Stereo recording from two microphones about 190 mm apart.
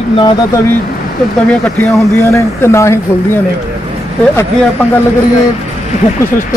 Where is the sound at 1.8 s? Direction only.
15° left (ahead or behind).